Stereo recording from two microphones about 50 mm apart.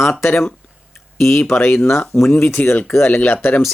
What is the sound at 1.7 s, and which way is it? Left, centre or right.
Speech, left.